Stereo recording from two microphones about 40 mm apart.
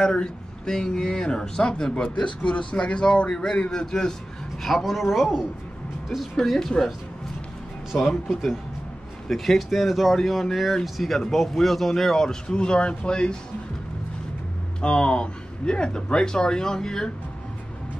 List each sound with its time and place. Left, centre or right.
0.0 s speech: centre
2.1 s speech: left; by 4.1 s centre
4.6 s speech: centre
7.9 s speech: centre
12.5 s speech: left
14.8 s speech: left